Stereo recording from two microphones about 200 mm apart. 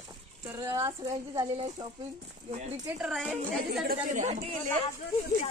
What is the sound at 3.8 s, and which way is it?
Speech, 40° right (ahead or behind).